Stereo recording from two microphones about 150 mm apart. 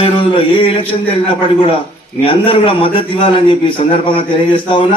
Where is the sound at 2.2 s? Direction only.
35° left (ahead or behind).